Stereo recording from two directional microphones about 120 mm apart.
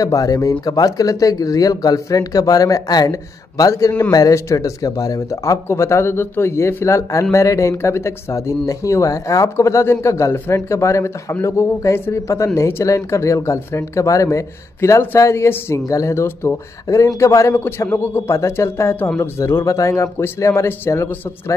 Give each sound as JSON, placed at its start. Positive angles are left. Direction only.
{"t": 0.0, "sound": "speech", "side_deg": 30}